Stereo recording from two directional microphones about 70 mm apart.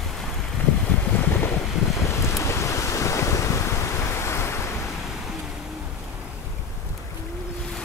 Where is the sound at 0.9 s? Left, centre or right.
Left.